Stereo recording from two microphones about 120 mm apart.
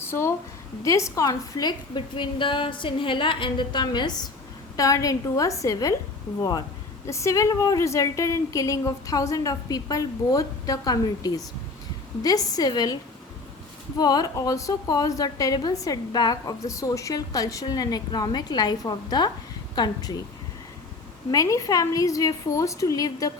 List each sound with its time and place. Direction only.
0.1 s a woman's voice: 20° left (ahead or behind)
14.0 s a woman's voice: 35° left (ahead or behind)
21.2 s a woman's voice: 30° left (ahead or behind)